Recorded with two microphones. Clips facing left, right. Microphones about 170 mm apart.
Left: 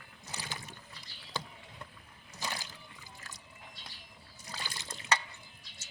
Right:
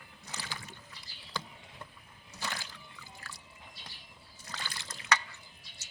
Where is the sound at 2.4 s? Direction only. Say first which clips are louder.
Even; 15° left (ahead or behind).